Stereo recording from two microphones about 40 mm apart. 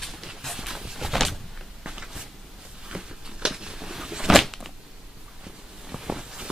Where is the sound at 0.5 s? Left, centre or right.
Centre.